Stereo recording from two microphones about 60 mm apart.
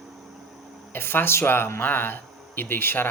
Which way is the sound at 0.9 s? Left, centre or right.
Left.